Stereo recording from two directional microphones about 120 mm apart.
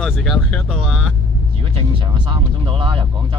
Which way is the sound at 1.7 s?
45° right (ahead or behind).